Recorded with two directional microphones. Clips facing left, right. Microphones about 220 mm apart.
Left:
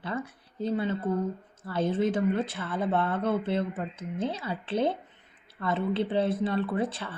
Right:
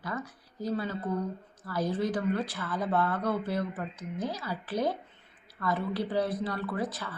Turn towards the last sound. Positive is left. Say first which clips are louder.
# left 4 dB
turn(degrees=25)  # may be behind; listen again after turning